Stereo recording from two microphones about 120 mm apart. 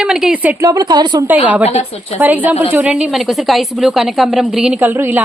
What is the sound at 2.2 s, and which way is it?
A woman's voice, 15° right (ahead or behind).